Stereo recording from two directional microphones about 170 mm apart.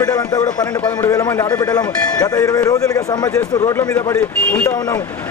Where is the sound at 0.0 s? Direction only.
20° left (ahead or behind).